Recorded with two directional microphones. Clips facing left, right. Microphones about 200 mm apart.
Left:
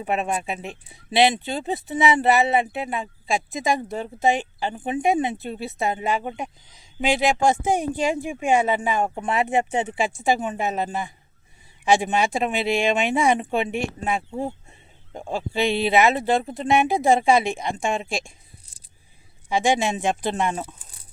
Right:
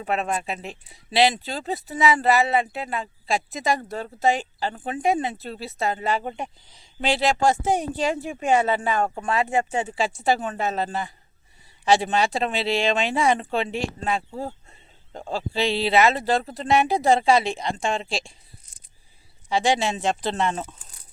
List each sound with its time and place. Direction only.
0.0 s speech: 15° left (ahead or behind)
6.2 s speech: 5° left (ahead or behind)
19.5 s speech: 15° left (ahead or behind)